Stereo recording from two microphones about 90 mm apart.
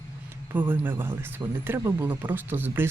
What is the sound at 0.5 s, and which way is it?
Speech, 20° right (ahead or behind).